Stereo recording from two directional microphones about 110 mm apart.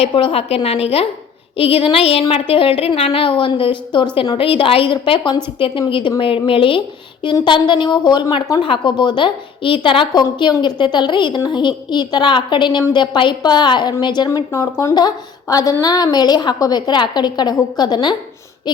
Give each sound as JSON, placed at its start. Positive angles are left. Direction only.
{"t": 0.1, "sound": "a woman's voice", "side_deg": 55}
{"t": 14.3, "sound": "a woman's voice", "side_deg": 25}